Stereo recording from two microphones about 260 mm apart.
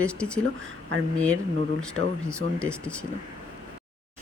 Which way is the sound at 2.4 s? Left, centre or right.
Centre.